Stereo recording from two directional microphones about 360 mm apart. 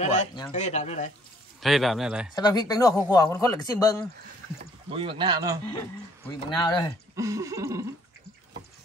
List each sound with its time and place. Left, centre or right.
0.0 s speech: centre
1.6 s speech: centre
2.3 s a man's voice: centre
4.9 s speech: centre
6.5 s a man's voice: centre
7.2 s speech: centre